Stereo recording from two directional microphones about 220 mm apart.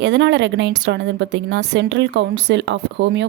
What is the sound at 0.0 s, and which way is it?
Speech, 50° right (ahead or behind).